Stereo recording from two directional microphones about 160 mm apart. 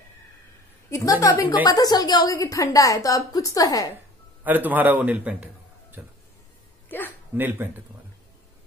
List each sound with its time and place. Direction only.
0.8 s a woman's voice: 20° left (ahead or behind)
4.5 s a man's voice: 10° right (ahead or behind)
6.9 s a sound: 10° left (ahead or behind)
7.3 s speech: 10° right (ahead or behind)